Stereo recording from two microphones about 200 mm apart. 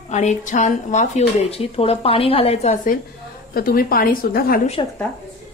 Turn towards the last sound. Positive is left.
turn(degrees=25)  # may be behind; listen again after turning